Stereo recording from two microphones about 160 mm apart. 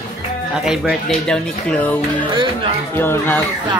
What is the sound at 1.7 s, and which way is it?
Speech, 10° left (ahead or behind).